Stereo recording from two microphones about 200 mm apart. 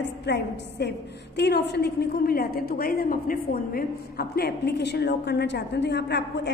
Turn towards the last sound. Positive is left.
turn(degrees=60)  # may be behind; listen again after turning